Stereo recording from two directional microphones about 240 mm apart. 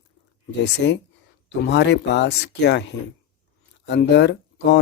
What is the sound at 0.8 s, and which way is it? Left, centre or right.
Speech, left.